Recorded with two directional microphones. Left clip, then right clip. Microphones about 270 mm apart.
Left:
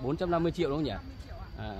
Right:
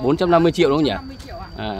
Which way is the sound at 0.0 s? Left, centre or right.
Centre.